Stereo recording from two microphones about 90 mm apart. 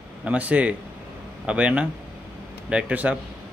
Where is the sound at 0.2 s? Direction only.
15° right (ahead or behind).